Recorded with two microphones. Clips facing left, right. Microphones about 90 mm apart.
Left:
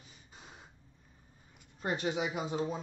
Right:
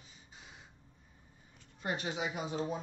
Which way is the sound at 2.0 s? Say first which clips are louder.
Left 3 dB; 30° left (ahead or behind).